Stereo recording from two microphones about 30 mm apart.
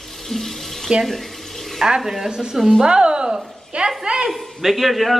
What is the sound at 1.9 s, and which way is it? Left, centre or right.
Speech, centre.